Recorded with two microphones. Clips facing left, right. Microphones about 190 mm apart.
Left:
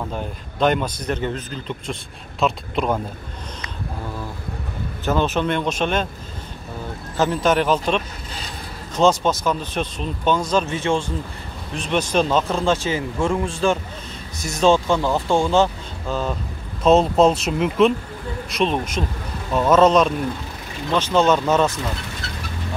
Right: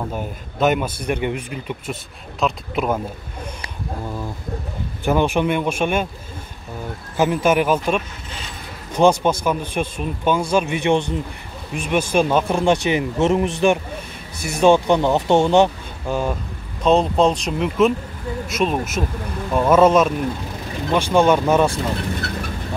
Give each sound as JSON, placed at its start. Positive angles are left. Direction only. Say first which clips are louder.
{"t": 0.1, "sound": "speech", "louder": "right 1 dB", "side_deg": -10}
{"t": 5.0, "sound": "speech", "louder": "right 2 dB", "side_deg": -15}
{"t": 7.2, "sound": "speech", "louder": "right 2 dB", "side_deg": -10}
{"t": 16.8, "sound": "speech", "louder": "left 1 dB", "side_deg": 5}
{"t": 22.2, "sound": "vehicle", "louder": "right 6 dB", "side_deg": -60}